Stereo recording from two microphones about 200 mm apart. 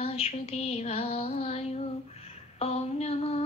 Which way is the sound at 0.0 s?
30° left (ahead or behind).